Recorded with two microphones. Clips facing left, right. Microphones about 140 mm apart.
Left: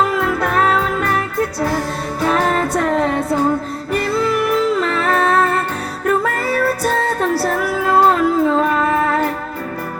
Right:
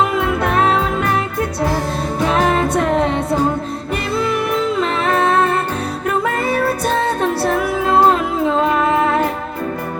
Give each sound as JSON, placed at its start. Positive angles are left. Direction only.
{"t": 0.2, "sound": "music", "side_deg": -20}
{"t": 2.2, "sound": "music", "side_deg": -20}